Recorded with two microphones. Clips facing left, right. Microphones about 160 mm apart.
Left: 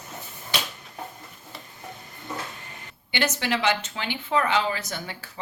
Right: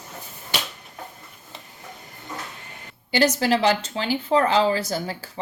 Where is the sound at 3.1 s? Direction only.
35° right (ahead or behind).